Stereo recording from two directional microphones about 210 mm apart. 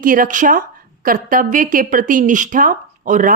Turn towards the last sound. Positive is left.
turn(degrees=-40)  # may be behind; listen again after turning